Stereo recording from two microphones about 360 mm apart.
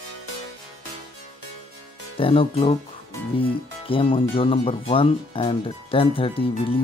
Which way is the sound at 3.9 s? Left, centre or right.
Centre.